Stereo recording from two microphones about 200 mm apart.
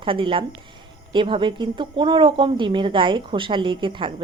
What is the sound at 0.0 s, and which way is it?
A woman's voice, 25° right (ahead or behind).